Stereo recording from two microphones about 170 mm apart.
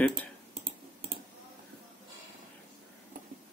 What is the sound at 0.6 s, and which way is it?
Clicking, 55° right (ahead or behind).